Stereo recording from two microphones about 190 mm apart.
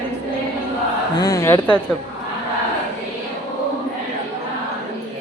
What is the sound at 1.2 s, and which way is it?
Speech, 15° left (ahead or behind).